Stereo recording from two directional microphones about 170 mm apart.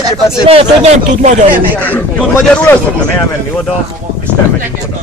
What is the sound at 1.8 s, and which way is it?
Speech, 10° left (ahead or behind).